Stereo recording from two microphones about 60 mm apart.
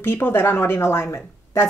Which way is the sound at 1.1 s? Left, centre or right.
Left.